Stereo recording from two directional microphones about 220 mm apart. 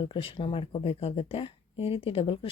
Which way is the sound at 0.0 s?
25° left (ahead or behind).